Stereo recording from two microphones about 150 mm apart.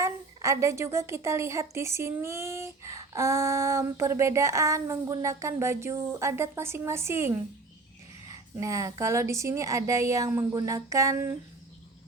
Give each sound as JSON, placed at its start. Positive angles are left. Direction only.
{"t": 0.0, "sound": "a woman's voice", "side_deg": -20}